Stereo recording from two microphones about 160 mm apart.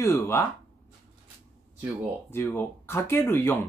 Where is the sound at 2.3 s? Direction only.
15° left (ahead or behind).